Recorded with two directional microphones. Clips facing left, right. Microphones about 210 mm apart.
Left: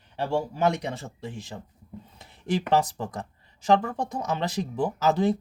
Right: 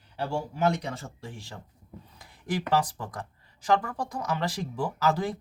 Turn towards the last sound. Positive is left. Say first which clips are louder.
# left 4 dB
turn(degrees=20)  # may be behind; listen again after turning